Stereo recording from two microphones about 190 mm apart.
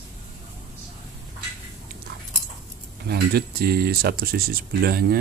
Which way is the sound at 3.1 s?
55° right (ahead or behind).